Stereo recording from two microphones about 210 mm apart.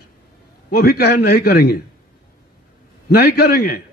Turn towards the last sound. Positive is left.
turn(degrees=50)  # may be behind; listen again after turning